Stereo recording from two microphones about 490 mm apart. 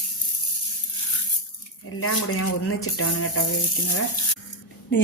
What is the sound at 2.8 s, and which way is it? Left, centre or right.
Speech, left.